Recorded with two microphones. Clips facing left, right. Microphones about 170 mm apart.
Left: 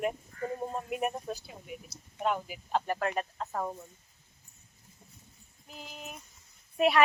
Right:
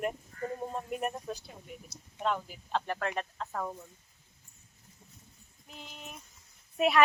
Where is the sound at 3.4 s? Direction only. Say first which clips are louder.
Left 2 dB; 20° left (ahead or behind).